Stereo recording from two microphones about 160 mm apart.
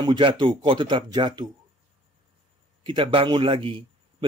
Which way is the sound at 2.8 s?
30° right (ahead or behind).